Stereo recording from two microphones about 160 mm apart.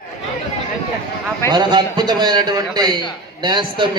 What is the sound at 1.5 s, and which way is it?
A man's voice, 25° right (ahead or behind).